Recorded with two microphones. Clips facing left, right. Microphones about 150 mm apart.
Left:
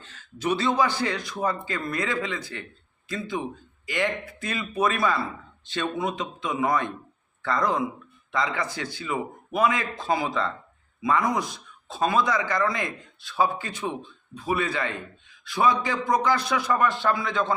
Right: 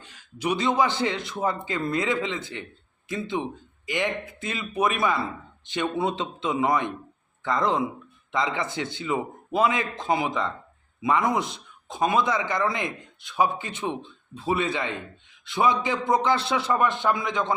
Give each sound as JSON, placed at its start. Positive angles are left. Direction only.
{"t": 0.0, "sound": "speech", "side_deg": -15}